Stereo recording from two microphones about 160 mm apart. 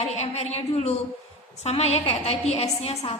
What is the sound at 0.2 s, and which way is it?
A woman's voice, 40° left (ahead or behind).